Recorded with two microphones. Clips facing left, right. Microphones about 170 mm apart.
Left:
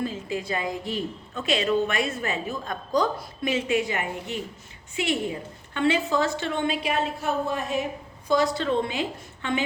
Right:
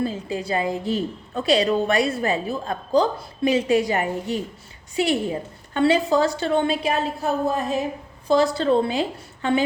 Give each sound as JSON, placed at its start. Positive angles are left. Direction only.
{"t": 0.0, "sound": "a woman's voice", "side_deg": -35}